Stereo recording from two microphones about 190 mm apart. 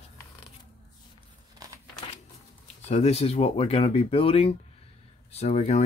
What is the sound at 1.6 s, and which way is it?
Crumpling, 20° right (ahead or behind).